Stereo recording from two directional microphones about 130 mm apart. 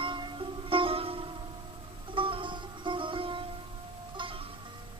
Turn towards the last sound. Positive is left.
turn(degrees=-40)  # may be behind; listen again after turning